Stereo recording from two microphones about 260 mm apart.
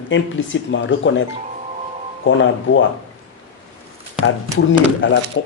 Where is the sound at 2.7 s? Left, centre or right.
Left.